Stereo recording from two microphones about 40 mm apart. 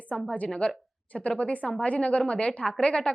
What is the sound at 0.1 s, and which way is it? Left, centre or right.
A woman's voice, left.